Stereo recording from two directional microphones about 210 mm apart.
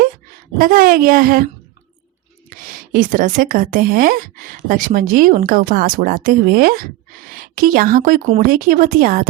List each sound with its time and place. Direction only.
0.6 s speech: 40° right (ahead or behind)
2.9 s a woman's voice: 40° right (ahead or behind)